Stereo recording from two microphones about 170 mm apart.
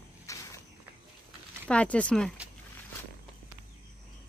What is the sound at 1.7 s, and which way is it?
Speech, 5° left (ahead or behind).